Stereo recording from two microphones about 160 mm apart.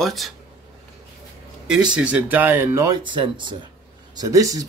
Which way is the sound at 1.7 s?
5° right (ahead or behind).